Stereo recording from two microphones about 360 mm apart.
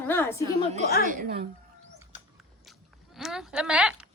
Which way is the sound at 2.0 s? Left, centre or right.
Centre.